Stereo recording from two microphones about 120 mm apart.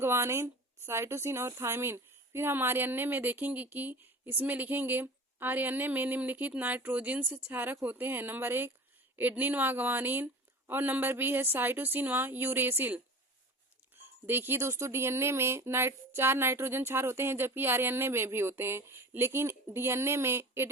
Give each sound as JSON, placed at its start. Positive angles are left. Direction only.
{"t": 0.0, "sound": "speech", "side_deg": -20}